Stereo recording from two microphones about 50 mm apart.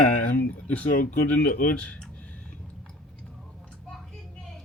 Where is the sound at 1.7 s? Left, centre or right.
Left.